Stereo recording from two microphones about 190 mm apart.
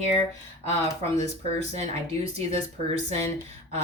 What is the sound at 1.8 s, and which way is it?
Speech, 35° right (ahead or behind).